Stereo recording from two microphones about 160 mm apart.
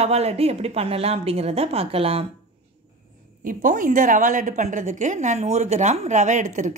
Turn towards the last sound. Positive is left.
turn(degrees=-50)  # may be behind; listen again after turning